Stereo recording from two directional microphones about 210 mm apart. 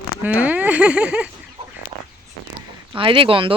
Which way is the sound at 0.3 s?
10° right (ahead or behind).